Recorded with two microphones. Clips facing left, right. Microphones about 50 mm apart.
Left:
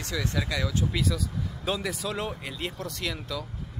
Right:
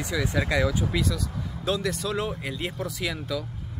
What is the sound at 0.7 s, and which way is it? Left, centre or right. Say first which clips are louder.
Speech: right 2 dB; centre.